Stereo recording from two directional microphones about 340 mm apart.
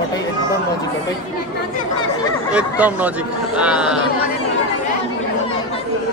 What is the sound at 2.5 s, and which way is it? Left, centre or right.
A man's voice, centre.